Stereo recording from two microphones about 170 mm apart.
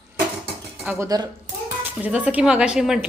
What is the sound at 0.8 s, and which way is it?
Speech, 20° right (ahead or behind).